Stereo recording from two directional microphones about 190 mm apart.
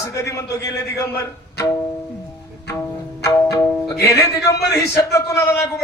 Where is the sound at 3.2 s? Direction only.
15° left (ahead or behind).